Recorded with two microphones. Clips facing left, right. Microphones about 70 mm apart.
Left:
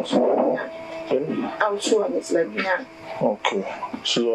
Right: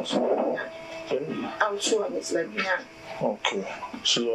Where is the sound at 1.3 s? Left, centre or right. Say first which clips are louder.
Left 4 dB; left.